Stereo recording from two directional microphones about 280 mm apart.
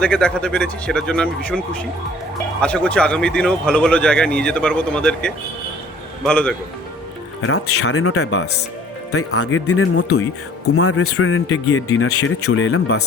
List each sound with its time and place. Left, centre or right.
0.0 s speech: centre
7.4 s speech: left